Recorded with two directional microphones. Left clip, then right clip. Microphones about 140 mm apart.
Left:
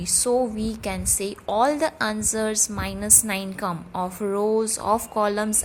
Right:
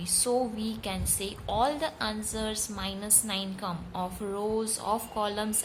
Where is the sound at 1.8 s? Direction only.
60° left (ahead or behind).